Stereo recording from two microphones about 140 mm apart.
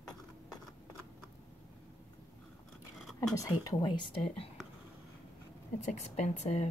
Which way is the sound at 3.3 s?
25° left (ahead or behind).